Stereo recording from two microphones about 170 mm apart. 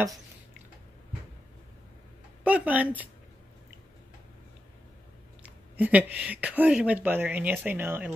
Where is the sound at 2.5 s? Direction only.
10° right (ahead or behind).